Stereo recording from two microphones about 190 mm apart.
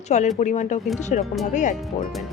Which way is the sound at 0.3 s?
40° left (ahead or behind).